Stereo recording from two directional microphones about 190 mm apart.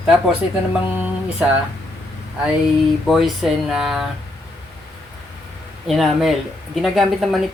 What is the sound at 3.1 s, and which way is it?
Speech, centre (ahead or behind).